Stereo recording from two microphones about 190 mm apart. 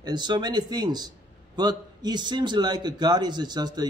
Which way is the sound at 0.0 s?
25° right (ahead or behind).